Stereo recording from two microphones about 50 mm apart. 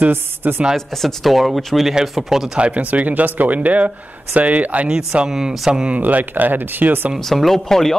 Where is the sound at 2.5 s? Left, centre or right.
Right.